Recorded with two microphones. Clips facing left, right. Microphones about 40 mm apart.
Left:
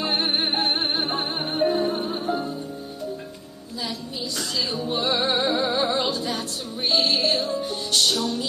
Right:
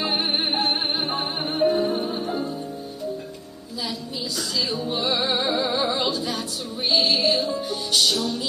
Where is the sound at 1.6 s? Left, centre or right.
Centre.